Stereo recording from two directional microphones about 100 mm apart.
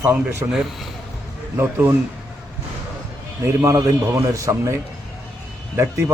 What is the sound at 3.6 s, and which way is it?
A man's voice, 30° right (ahead or behind).